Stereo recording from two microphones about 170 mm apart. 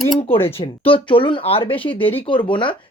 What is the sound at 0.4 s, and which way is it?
Speech, 30° left (ahead or behind).